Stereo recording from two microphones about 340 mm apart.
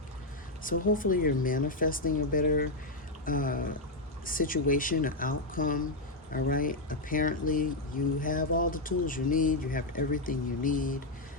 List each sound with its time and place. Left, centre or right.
0.9 s speech: left